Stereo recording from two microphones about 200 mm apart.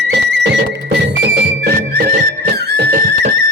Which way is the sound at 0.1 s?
60° right (ahead or behind).